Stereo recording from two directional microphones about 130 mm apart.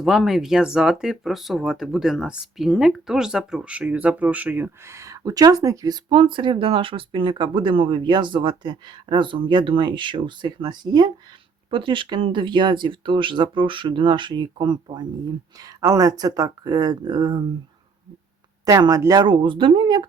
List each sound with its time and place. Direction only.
0.0 s speech: centre (ahead or behind); by 6.0 s 25° right (ahead or behind)
6.1 s speech: 40° right (ahead or behind)
18.6 s speech: 30° right (ahead or behind)